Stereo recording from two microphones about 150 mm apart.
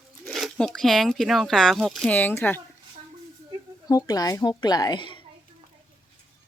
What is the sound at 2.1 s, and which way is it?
Speech, 10° left (ahead or behind).